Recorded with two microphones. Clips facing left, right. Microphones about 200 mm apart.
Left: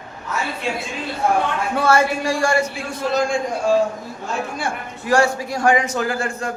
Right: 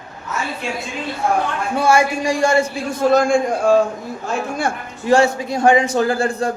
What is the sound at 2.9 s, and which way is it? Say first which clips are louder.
Speech: right 6 dB; 50° right (ahead or behind).